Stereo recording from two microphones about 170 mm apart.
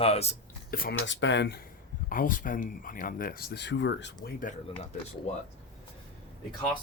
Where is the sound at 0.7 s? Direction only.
65° left (ahead or behind).